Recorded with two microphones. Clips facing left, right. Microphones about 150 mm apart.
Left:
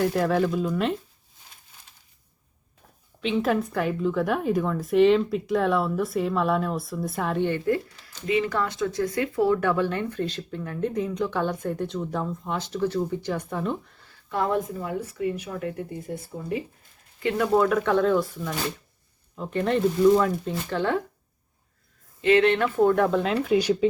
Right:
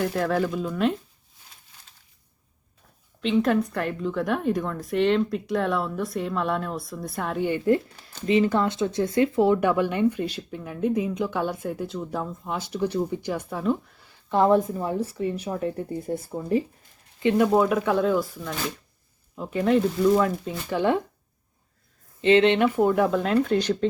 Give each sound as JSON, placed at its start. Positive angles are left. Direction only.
{"t": 0.0, "sound": "a woman's voice", "side_deg": 0}
{"t": 3.2, "sound": "a woman's voice", "side_deg": 0}
{"t": 7.6, "sound": "speech", "side_deg": -25}
{"t": 14.3, "sound": "speech", "side_deg": -30}
{"t": 17.2, "sound": "a woman's voice", "side_deg": -20}
{"t": 22.2, "sound": "a woman's voice", "side_deg": -25}